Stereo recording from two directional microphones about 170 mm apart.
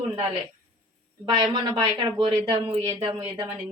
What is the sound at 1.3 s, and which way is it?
Speech, 25° right (ahead or behind).